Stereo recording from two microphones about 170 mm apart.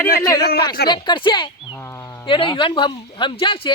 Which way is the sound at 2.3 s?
30° left (ahead or behind).